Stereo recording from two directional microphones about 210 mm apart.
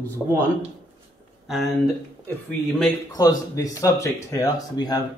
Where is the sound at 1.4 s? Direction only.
Centre (ahead or behind).